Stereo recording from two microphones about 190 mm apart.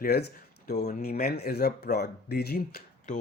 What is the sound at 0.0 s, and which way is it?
Speech, 55° left (ahead or behind).